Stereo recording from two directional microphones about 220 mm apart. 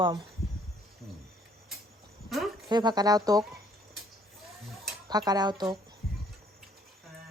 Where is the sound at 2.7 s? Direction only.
20° right (ahead or behind).